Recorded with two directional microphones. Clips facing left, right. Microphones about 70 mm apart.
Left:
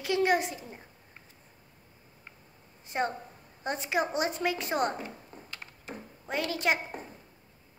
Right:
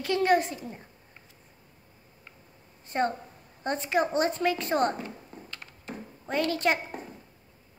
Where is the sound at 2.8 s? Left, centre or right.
Centre.